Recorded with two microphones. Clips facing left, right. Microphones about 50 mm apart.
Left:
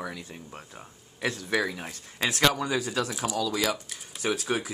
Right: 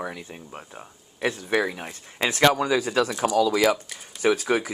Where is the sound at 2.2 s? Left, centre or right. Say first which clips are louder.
Right 5 dB; right.